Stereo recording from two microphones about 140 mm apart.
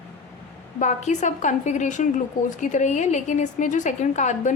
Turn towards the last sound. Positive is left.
turn(degrees=60)  # may be behind; listen again after turning